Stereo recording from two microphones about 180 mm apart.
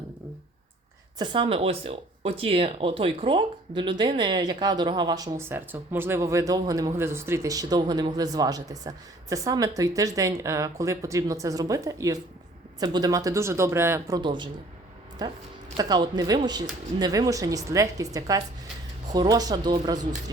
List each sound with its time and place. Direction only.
1.2 s speech: 25° right (ahead or behind)
14.2 s speech: 25° right (ahead or behind)
15.8 s speech: 20° right (ahead or behind)